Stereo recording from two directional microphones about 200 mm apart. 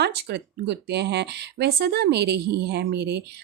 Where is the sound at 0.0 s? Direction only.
55° right (ahead or behind).